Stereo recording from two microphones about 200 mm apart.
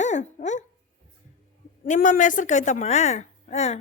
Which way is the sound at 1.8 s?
45° left (ahead or behind).